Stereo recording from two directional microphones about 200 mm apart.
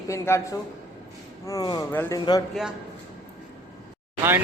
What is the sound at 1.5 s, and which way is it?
Speech, 20° left (ahead or behind).